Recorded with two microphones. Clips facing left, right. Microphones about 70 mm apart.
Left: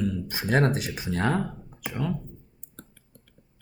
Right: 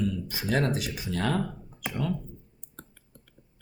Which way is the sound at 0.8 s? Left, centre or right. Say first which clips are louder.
Left 3 dB; left.